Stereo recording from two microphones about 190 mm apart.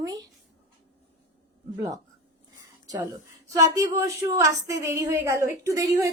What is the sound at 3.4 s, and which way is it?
A woman's voice, 15° right (ahead or behind).